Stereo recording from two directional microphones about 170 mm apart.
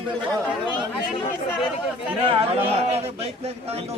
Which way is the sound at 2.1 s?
30° right (ahead or behind).